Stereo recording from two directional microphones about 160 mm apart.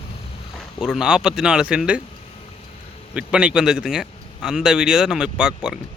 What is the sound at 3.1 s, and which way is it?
A man's voice, 5° right (ahead or behind).